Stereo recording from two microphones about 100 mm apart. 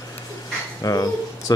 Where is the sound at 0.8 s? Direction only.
40° left (ahead or behind).